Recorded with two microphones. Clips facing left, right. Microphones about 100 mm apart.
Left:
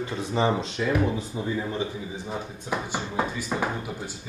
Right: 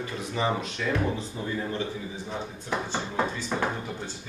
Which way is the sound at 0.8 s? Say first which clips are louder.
Left 4 dB; 10° left (ahead or behind).